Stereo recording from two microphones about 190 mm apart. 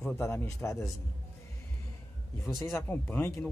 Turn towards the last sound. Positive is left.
turn(degrees=10)  # may be behind; listen again after turning